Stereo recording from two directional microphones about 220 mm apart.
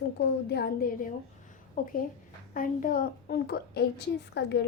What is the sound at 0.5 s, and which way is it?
A child's voice, 45° left (ahead or behind).